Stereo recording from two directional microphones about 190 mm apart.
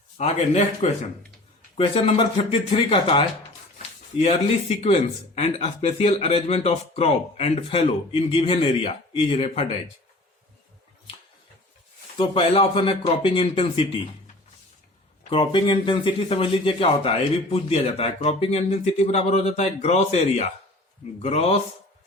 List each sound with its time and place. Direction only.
0.2 s speech: 35° left (ahead or behind)
12.1 s speech: 30° left (ahead or behind)
15.3 s speech: 25° left (ahead or behind)